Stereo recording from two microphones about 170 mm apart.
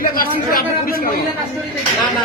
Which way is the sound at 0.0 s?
55° left (ahead or behind).